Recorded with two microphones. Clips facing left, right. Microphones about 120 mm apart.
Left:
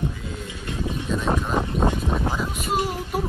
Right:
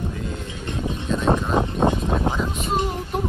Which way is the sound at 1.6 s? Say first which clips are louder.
Right 3 dB; 20° right (ahead or behind).